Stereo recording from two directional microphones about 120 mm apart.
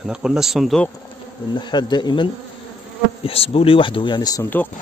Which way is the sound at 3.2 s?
55° left (ahead or behind).